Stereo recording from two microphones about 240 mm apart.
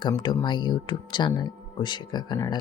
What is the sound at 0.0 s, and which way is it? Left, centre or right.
Speech, centre.